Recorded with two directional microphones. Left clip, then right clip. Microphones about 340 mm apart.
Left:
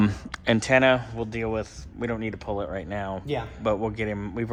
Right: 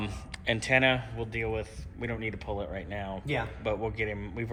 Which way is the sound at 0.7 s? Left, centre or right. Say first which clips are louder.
Left 5 dB; left.